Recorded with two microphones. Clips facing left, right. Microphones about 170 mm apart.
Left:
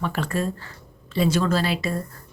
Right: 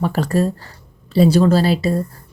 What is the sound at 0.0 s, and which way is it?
A woman's voice, 40° right (ahead or behind).